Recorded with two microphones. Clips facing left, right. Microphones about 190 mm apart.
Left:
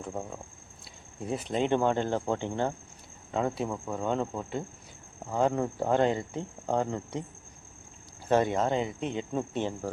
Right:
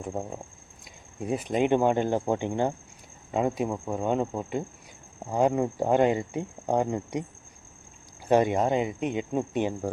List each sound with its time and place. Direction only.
0.0 s speech: 20° right (ahead or behind)
8.3 s speech: 15° right (ahead or behind)